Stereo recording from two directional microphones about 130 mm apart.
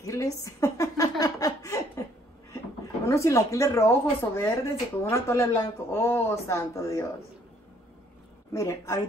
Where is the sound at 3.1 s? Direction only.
25° left (ahead or behind).